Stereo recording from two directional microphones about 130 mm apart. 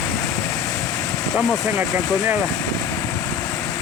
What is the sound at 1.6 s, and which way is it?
Speech, centre (ahead or behind).